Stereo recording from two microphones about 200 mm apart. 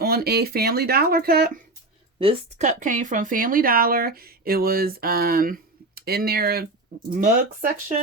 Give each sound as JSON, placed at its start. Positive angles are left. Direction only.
{"t": 0.0, "sound": "speech", "side_deg": -50}
{"t": 2.1, "sound": "speech", "side_deg": -30}